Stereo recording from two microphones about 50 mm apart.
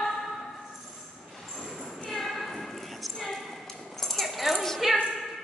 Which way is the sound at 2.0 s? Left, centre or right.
Centre.